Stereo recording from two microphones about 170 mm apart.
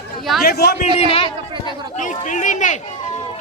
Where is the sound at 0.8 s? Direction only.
35° left (ahead or behind).